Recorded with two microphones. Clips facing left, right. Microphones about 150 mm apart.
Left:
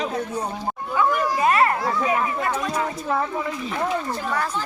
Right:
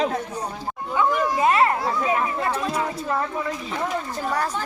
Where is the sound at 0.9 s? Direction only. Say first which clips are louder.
Even; 20° right (ahead or behind).